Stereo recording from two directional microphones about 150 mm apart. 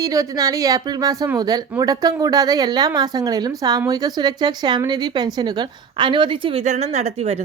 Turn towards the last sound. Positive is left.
turn(degrees=-45)  # may be behind; listen again after turning